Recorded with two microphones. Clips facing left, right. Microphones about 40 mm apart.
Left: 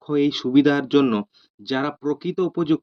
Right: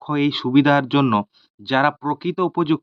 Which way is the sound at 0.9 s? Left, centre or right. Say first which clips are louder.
Even; right.